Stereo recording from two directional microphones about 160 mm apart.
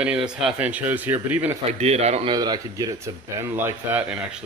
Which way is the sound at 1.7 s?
40° right (ahead or behind).